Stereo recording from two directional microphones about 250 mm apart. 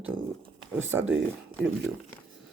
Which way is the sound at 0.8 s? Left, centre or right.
Centre.